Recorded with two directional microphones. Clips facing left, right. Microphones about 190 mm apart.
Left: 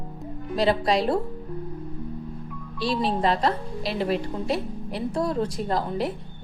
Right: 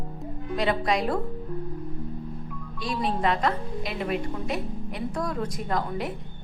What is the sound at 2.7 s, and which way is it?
A woman's voice, 30° left (ahead or behind).